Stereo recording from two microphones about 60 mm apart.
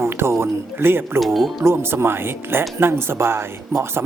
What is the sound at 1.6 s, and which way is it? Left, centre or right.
Speech, right.